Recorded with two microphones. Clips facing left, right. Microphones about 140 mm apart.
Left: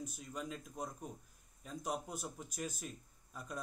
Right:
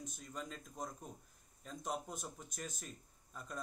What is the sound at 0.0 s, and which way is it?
Speech, 10° left (ahead or behind).